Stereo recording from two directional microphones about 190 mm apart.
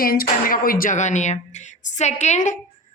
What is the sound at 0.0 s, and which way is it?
A woman's voice, 50° left (ahead or behind).